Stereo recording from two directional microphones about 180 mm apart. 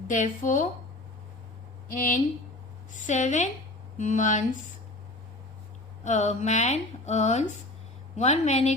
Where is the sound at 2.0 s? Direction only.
50° left (ahead or behind).